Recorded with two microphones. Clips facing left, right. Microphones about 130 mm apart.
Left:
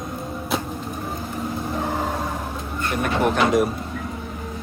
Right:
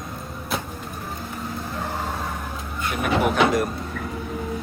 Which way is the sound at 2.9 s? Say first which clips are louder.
Even; 5° right (ahead or behind).